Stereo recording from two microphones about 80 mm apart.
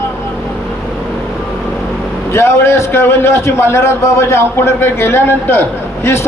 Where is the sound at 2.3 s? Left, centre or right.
Left.